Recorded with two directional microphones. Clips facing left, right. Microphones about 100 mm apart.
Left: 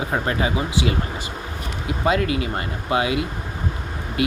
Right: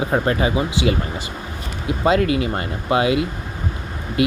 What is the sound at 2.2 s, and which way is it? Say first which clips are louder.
Speech: right 4 dB; 30° left (ahead or behind).